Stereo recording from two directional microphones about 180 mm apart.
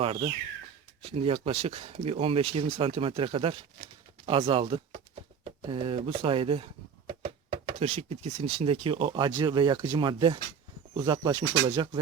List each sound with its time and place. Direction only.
0.0 s speech: 30° right (ahead or behind)
7.1 s a sound: 35° right (ahead or behind)
8.5 s speech: 35° right (ahead or behind)